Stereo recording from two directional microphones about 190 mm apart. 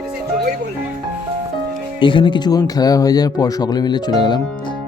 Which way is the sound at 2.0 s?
25° left (ahead or behind).